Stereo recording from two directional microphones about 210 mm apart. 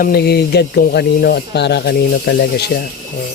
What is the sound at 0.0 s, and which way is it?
Speech, 45° left (ahead or behind).